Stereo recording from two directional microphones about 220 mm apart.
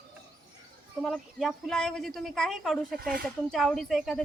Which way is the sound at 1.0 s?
Centre (ahead or behind).